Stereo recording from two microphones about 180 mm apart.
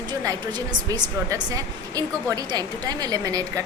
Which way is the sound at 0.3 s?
20° right (ahead or behind).